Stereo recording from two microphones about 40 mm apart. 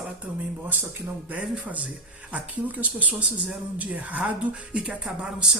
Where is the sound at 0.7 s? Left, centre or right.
Right.